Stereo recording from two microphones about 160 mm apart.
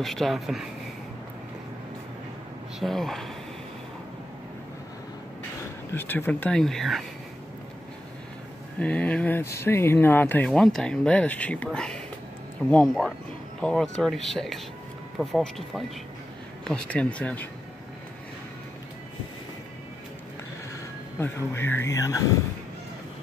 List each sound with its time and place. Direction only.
0.0 s speech: centre (ahead or behind)
2.8 s speech: centre (ahead or behind)
5.9 s speech: 10° left (ahead or behind)
8.7 s speech: 10° left (ahead or behind)
21.2 s speech: 15° left (ahead or behind)